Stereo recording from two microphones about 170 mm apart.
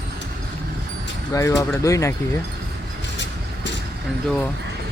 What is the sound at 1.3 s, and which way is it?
Speech, 15° left (ahead or behind).